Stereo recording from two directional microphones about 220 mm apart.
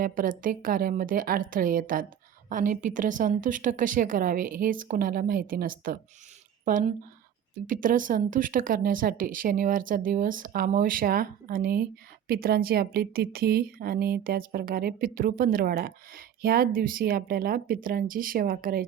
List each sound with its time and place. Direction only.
0.0 s speech: 40° right (ahead or behind)